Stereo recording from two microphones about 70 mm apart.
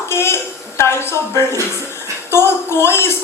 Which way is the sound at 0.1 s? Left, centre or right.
Left.